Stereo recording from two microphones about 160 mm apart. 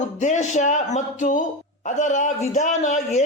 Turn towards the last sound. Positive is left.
turn(degrees=50)  # may be behind; listen again after turning